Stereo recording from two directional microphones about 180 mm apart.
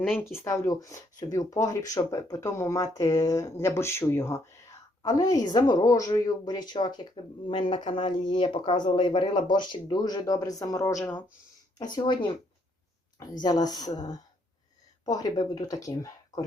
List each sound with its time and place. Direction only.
0.2 s speech: 15° left (ahead or behind)
11.8 s speech: 25° left (ahead or behind)
13.4 s speech: 20° left (ahead or behind)
15.0 s speech: 20° left (ahead or behind)